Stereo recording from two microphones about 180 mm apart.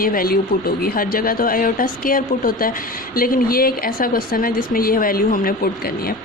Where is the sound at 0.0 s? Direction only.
55° left (ahead or behind).